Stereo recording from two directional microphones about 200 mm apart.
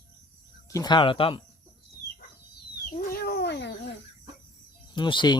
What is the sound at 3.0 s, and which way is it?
Cat, 50° left (ahead or behind).